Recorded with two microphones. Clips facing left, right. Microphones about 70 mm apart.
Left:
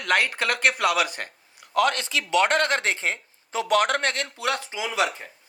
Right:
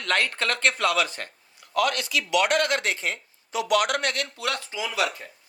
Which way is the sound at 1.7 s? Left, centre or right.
Left.